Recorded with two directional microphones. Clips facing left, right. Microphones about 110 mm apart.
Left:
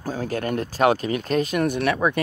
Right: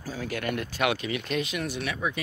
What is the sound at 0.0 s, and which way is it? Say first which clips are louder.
Speech: left 5 dB; 45° left (ahead or behind).